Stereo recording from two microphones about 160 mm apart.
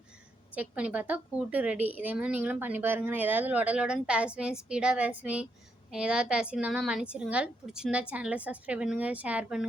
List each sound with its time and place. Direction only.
0.5 s a woman's voice: 10° right (ahead or behind)